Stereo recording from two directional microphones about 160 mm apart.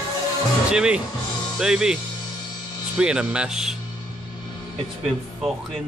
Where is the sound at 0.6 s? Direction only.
5° right (ahead or behind).